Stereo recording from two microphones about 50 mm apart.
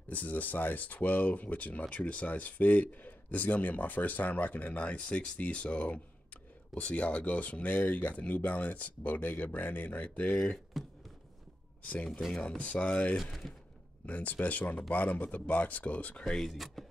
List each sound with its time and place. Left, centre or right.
0.1 s speech: left
10.8 s a sound: centre
11.8 s speech: left
13.1 s speech: centre
14.0 s speech: left
16.3 s speech: centre
16.5 s speech: centre